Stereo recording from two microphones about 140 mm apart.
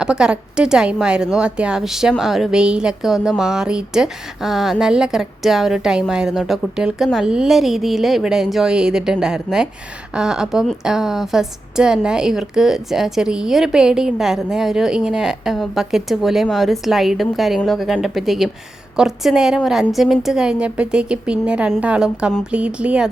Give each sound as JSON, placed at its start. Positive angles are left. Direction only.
{"t": 0.0, "sound": "a woman's voice", "side_deg": -5}